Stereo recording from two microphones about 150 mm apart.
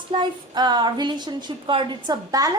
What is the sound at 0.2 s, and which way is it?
A woman's voice, 30° right (ahead or behind).